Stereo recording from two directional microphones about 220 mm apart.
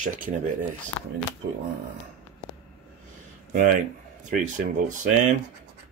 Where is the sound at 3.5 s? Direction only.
35° right (ahead or behind).